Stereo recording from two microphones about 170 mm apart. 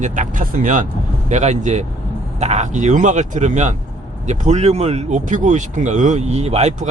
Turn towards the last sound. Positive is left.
turn(degrees=-40)  # may be behind; listen again after turning